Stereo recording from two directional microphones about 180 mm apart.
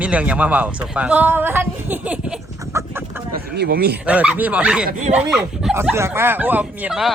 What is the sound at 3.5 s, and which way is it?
Speech, 60° right (ahead or behind).